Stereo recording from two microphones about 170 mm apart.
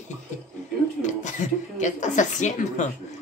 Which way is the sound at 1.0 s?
45° left (ahead or behind).